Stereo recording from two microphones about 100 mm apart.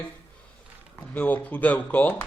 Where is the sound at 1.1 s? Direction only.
15° left (ahead or behind).